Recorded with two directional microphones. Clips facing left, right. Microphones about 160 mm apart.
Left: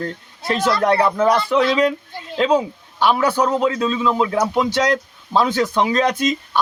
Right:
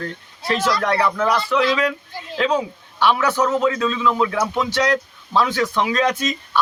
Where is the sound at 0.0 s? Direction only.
25° left (ahead or behind).